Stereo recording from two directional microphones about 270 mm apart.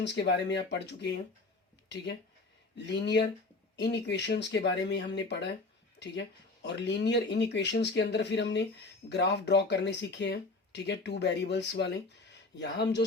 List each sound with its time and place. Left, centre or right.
0.0 s speech: left
2.7 s speech: left